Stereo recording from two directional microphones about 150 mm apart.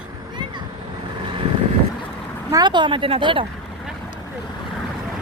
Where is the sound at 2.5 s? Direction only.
30° right (ahead or behind).